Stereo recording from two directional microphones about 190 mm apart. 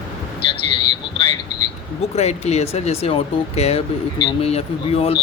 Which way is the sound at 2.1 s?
35° left (ahead or behind).